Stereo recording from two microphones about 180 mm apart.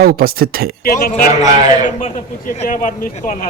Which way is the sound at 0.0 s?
55° right (ahead or behind).